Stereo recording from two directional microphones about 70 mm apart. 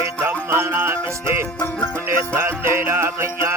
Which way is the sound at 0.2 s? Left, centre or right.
Right.